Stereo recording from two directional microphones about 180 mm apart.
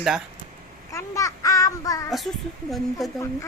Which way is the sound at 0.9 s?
20° left (ahead or behind).